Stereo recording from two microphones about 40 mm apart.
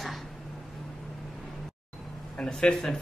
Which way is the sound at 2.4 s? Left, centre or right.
Left.